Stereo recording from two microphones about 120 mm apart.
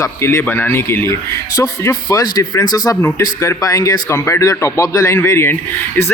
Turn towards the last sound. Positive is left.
turn(degrees=20)  # may be behind; listen again after turning